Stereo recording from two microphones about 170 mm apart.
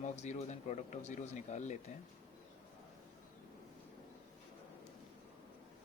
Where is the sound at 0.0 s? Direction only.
40° left (ahead or behind).